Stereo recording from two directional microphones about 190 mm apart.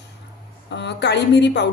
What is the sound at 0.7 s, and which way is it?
Speech, 65° left (ahead or behind).